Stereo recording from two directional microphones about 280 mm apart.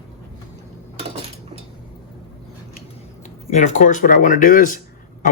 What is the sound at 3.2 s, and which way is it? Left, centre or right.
A man's voice, left.